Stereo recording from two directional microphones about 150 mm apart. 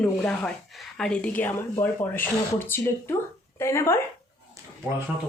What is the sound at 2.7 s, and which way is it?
Speech, 15° left (ahead or behind).